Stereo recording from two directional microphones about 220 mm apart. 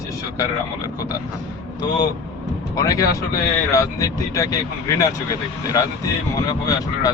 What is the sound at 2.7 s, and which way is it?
Speech, 15° left (ahead or behind).